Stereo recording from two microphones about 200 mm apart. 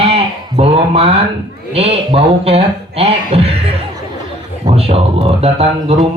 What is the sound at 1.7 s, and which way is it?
Speech, 30° right (ahead or behind).